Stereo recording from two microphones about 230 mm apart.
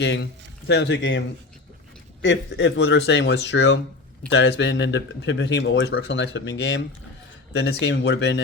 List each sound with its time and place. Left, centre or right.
0.0 s speech: left
2.2 s speech: left